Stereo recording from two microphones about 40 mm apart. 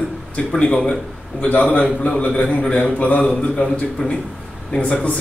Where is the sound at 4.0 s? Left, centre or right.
Centre.